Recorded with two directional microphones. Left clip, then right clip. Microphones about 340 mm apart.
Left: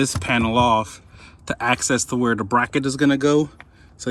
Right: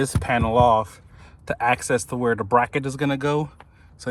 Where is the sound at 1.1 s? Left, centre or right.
Centre.